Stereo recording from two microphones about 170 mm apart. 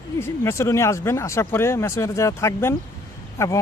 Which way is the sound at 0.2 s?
15° left (ahead or behind).